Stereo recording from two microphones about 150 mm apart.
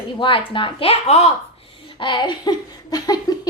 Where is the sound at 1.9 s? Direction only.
35° left (ahead or behind).